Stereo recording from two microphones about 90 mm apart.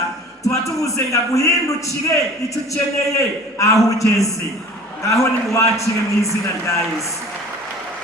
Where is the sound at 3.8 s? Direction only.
35° left (ahead or behind).